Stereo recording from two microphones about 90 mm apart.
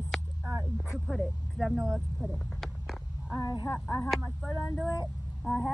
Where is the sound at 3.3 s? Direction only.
50° left (ahead or behind).